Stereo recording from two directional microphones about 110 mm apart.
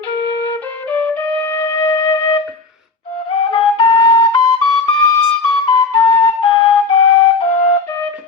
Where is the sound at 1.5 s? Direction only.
30° left (ahead or behind).